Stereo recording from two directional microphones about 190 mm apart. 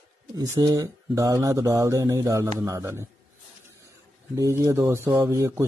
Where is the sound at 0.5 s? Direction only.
20° right (ahead or behind).